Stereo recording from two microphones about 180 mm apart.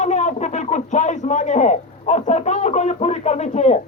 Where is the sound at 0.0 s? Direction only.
40° left (ahead or behind).